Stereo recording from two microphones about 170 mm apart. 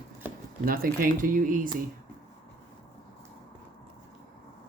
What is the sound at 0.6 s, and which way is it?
Speech, 60° right (ahead or behind).